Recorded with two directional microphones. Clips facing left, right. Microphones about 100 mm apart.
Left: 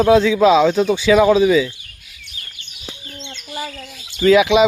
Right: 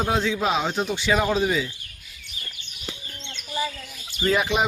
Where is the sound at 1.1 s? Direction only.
90° left.